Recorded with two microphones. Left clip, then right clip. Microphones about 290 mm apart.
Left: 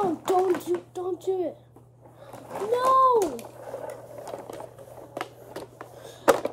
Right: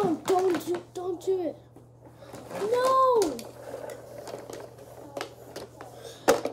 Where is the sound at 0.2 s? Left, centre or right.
Centre.